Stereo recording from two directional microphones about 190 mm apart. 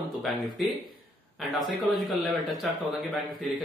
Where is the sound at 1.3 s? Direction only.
Centre (ahead or behind).